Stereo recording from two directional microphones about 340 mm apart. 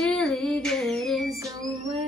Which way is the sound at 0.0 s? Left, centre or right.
Centre.